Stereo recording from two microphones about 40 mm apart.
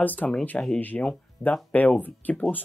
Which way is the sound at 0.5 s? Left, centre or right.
Left.